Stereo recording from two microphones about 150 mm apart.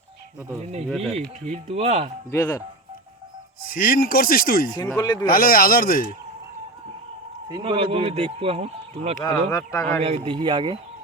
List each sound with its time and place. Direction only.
0.6 s speech: 45° right (ahead or behind)
0.9 s speech: centre (ahead or behind)
1.5 s speech: 45° right (ahead or behind)
2.3 s speech: 15° left (ahead or behind)
3.6 s speech: 80° left
4.9 s speech: 30° left (ahead or behind)
5.2 s speech: 75° left (ahead or behind)
7.4 s speech: 30° right (ahead or behind)
9.2 s speech: 20° left (ahead or behind)
10.0 s speech: 40° right (ahead or behind)